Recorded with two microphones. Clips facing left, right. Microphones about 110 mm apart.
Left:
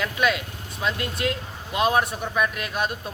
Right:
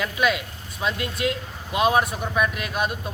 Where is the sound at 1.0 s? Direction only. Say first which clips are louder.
Right 1 dB; 45° left (ahead or behind).